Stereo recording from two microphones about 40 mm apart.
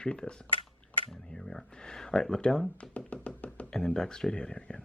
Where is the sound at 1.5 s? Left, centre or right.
Centre.